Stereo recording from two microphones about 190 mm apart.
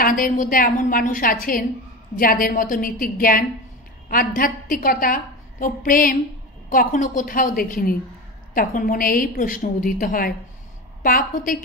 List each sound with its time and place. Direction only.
0.0 s a woman's voice: 45° left (ahead or behind)